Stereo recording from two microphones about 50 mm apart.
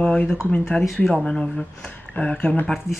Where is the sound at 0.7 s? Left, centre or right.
Left.